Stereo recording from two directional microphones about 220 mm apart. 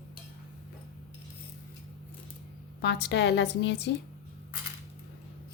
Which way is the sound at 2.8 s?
50° left (ahead or behind).